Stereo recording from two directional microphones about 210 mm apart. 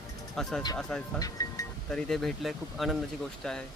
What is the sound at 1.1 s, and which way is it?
Speech, 15° left (ahead or behind).